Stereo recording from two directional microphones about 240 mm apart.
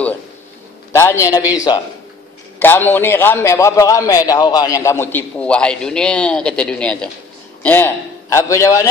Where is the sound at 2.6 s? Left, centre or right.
Centre.